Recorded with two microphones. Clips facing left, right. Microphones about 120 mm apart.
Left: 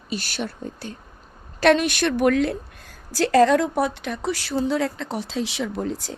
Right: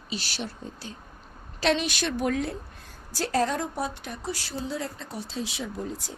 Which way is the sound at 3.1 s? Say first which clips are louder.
Left 10 dB; 90° left.